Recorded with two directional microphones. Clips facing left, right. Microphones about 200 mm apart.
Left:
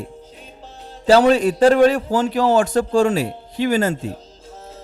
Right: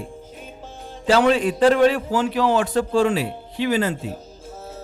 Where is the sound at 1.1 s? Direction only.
40° left (ahead or behind).